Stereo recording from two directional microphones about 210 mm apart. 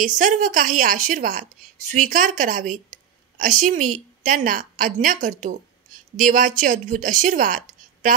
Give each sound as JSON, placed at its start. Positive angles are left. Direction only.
{"t": 0.0, "sound": "a woman's voice", "side_deg": -35}